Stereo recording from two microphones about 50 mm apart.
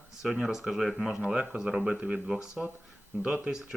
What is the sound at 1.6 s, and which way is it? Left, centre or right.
Speech, centre.